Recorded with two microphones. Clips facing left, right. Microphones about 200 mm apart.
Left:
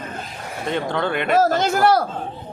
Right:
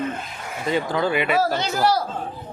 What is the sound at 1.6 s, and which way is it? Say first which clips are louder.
Speech: left 4 dB; 55° left (ahead or behind).